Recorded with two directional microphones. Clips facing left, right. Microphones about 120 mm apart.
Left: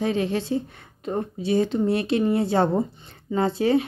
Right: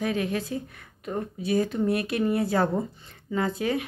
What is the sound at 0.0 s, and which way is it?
A woman's voice, 30° left (ahead or behind).